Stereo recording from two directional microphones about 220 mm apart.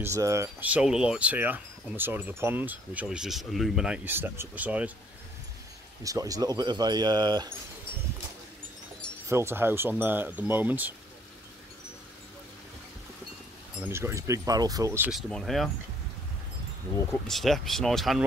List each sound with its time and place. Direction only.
0.0 s speech: 15° right (ahead or behind)
6.0 s speech: 15° right (ahead or behind)
9.3 s speech: 10° right (ahead or behind)
13.7 s speech: 10° right (ahead or behind)
15.0 s speech: centre (ahead or behind)
17.3 s speech: centre (ahead or behind)